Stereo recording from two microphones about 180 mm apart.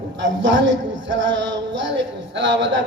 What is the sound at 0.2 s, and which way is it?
A man's voice, 90° right.